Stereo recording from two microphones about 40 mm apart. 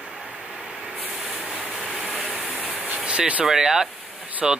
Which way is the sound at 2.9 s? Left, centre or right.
Right.